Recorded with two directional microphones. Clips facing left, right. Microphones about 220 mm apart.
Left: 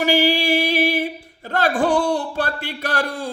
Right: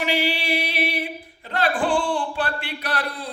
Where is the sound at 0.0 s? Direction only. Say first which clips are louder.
Left 6 dB; 45° left (ahead or behind).